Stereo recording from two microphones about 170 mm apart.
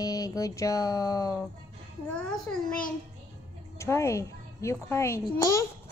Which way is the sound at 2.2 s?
5° left (ahead or behind).